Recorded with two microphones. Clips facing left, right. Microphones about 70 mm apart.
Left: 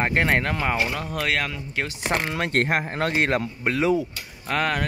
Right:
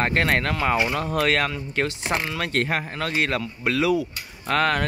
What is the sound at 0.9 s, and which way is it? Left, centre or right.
Speech, centre.